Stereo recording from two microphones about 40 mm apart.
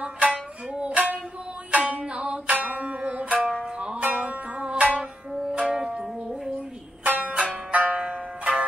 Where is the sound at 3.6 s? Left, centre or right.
Right.